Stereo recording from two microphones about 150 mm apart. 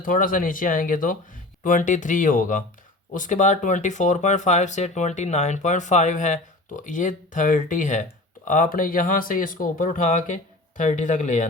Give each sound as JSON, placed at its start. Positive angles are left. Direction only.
{"t": 0.0, "sound": "speech", "side_deg": 65}